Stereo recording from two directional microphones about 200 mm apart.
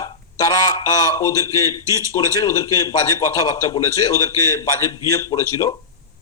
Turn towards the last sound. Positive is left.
turn(degrees=15)  # may be behind; listen again after turning